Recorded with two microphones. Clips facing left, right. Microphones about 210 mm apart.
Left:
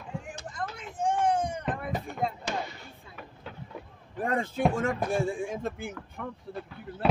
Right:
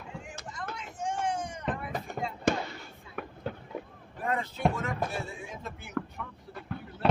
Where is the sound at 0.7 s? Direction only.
55° left (ahead or behind).